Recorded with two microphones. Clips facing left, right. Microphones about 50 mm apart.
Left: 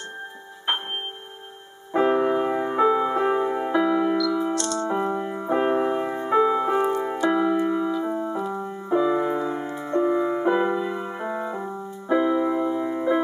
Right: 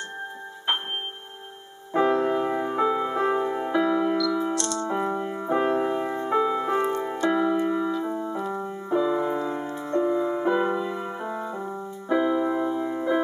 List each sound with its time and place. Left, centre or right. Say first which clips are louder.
2.0 s music: left 2 dB; centre
7.6 s keyboard: left 1 dB; centre
8.1 s music: left 2 dB; centre
11.1 s keyboard: left 3 dB; centre
11.6 s music: left 1 dB; centre